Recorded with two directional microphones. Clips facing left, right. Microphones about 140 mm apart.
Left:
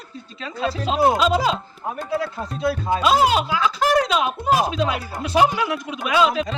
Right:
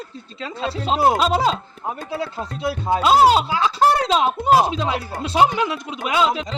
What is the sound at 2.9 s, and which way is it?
Speech, 25° right (ahead or behind).